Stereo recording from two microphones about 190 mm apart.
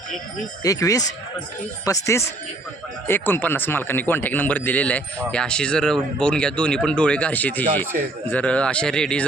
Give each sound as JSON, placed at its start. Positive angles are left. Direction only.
{"t": 0.6, "sound": "a man's voice", "side_deg": 15}